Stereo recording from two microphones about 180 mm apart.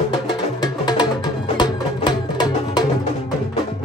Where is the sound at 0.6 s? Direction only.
25° left (ahead or behind).